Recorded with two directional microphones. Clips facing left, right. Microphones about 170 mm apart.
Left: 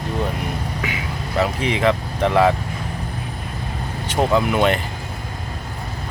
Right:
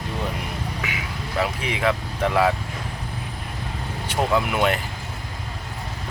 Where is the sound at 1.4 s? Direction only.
5° right (ahead or behind).